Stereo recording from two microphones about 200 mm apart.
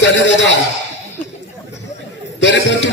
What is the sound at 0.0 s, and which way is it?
Speech, 65° left (ahead or behind).